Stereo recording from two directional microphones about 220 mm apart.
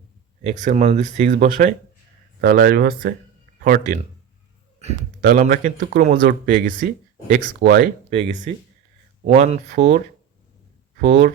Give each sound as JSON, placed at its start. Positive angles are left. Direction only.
{"t": 0.6, "sound": "speech", "side_deg": -30}
{"t": 5.2, "sound": "speech", "side_deg": -40}
{"t": 8.1, "sound": "speech", "side_deg": -30}
{"t": 9.6, "sound": "speech", "side_deg": -50}